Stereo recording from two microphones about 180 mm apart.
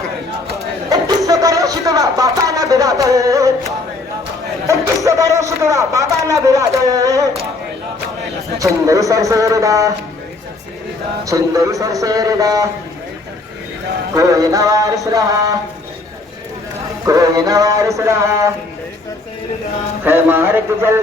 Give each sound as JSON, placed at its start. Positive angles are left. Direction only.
{"t": 1.3, "sound": "a sound", "side_deg": -20}
{"t": 4.6, "sound": "a sound", "side_deg": -15}
{"t": 8.5, "sound": "speech", "side_deg": -15}
{"t": 11.3, "sound": "speech", "side_deg": -15}
{"t": 14.2, "sound": "speech", "side_deg": -15}
{"t": 17.1, "sound": "speech", "side_deg": -20}
{"t": 20.1, "sound": "speech", "side_deg": -15}